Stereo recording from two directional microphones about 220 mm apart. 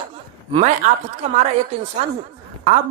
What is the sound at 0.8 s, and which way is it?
Speech, 35° right (ahead or behind).